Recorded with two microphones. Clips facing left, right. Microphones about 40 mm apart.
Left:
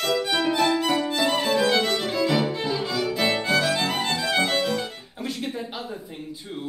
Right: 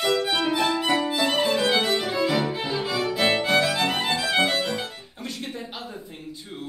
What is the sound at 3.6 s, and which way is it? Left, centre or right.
Music, centre.